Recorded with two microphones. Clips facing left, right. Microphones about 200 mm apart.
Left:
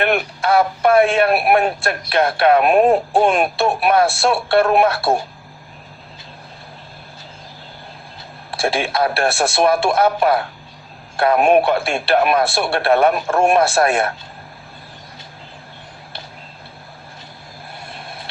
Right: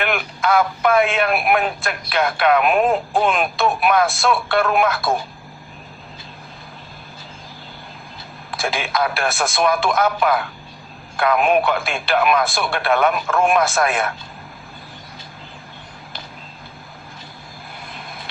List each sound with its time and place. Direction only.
0.2 s a man's voice: 30° left (ahead or behind)
3.2 s a man's voice: 30° left (ahead or behind)
8.4 s a man's voice: 30° left (ahead or behind)
11.3 s speech: 45° left (ahead or behind)
11.6 s a man's voice: 30° left (ahead or behind)